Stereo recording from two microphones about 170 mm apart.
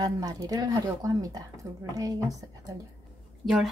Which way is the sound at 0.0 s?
25° right (ahead or behind).